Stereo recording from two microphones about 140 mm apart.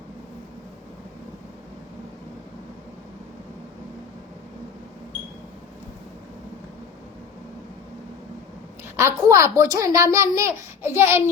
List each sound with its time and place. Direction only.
9.0 s a child's voice: 20° right (ahead or behind)